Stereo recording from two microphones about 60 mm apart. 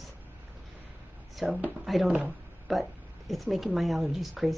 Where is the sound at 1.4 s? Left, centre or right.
Centre.